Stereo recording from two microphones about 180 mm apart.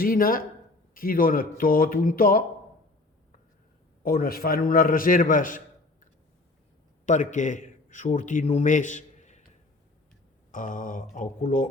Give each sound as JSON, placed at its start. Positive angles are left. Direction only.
{"t": 0.0, "sound": "a man's voice", "side_deg": 50}
{"t": 4.0, "sound": "a man's voice", "side_deg": 55}
{"t": 7.0, "sound": "a man's voice", "side_deg": 40}
{"t": 10.5, "sound": "a man's voice", "side_deg": 45}